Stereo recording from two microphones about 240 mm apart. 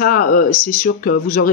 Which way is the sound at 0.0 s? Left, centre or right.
Left.